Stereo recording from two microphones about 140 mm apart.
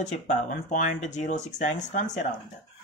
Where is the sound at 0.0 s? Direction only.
60° left (ahead or behind).